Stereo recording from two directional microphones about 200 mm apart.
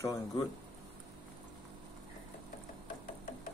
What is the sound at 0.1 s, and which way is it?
Speech, 15° left (ahead or behind).